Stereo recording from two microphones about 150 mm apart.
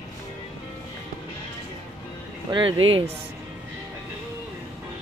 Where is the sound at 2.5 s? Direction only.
35° right (ahead or behind).